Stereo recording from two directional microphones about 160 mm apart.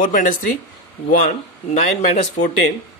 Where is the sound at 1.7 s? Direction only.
45° left (ahead or behind).